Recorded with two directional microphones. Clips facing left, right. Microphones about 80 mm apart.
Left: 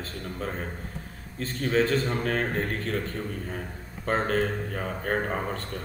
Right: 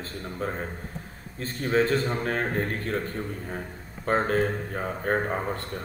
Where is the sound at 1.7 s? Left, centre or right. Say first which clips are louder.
Right 1 dB; right.